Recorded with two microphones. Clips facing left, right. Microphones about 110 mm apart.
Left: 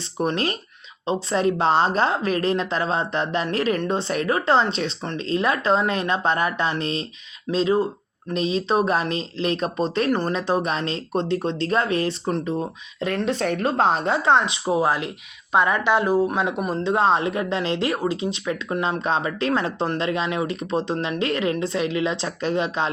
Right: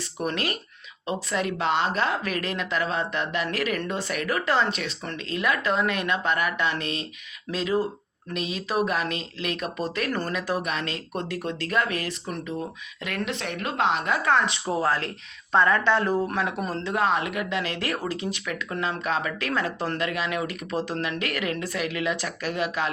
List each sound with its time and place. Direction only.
0.2 s speech: 30° left (ahead or behind)